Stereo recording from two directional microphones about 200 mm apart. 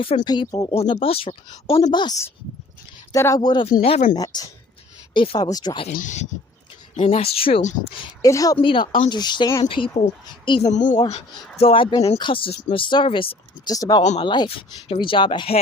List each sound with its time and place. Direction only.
0.3 s a woman's voice: 20° left (ahead or behind)
0.7 s a woman's voice: 30° left (ahead or behind)
5.9 s a woman's voice: 40° left (ahead or behind)
7.9 s a woman's voice: 15° left (ahead or behind)
10.7 s speech: 35° left (ahead or behind)
11.5 s a woman's voice: 25° left (ahead or behind)